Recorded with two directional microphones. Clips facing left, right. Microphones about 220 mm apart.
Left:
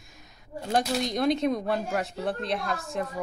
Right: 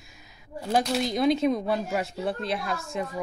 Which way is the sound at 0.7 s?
Centre (ahead or behind).